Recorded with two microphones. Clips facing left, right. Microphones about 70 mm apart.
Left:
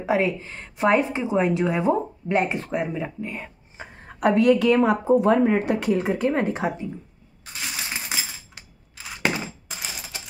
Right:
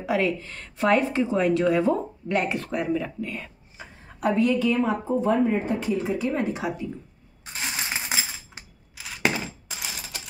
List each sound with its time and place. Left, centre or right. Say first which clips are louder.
0.0 s a woman's voice: left 2 dB; left
3.8 s a sound: left 3 dB; left
4.2 s speech: left 4 dB; left
7.6 s coin: right 1 dB; right
8.9 s scissors: even; centre